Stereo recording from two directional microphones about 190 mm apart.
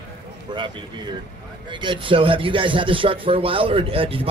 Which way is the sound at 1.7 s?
25° right (ahead or behind).